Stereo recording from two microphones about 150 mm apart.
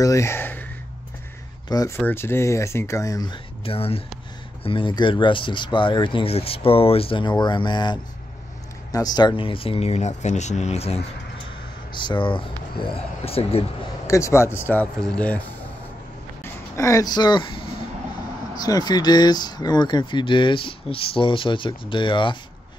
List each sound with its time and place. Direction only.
0.0 s speech: 20° left (ahead or behind)
1.7 s speech: 25° left (ahead or behind)
3.6 s speech: 40° left (ahead or behind)
11.9 s speech: 30° left (ahead or behind)
14.0 s speech: 20° left (ahead or behind)
16.7 s speech: 20° left (ahead or behind)